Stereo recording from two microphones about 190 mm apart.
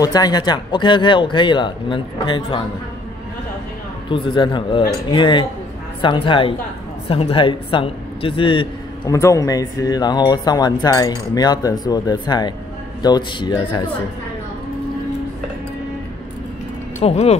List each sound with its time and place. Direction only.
0.0 s a woman's voice: 20° left (ahead or behind)
4.1 s a woman's voice: 25° left (ahead or behind)
17.0 s speech: 35° left (ahead or behind)